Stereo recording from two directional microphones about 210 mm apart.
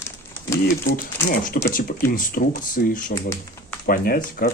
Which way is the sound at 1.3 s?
40° left (ahead or behind).